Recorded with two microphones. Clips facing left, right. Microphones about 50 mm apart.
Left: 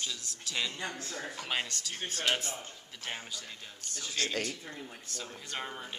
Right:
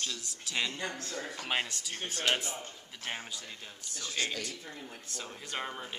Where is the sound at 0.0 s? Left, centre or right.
Centre.